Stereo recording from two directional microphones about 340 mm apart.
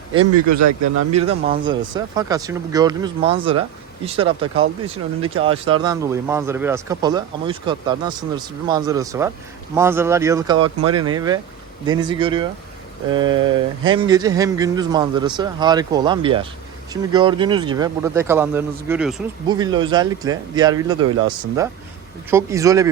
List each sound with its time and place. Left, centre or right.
0.1 s speech: right
1.1 s speech: centre
19.5 s speech: centre